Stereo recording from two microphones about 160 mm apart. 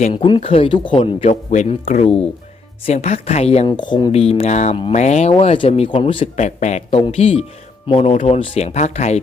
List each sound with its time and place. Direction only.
0.1 s speech: 35° left (ahead or behind)
1.2 s speech: 45° left (ahead or behind); by 6.2 s 30° left (ahead or behind)
6.3 s speech: 45° left (ahead or behind)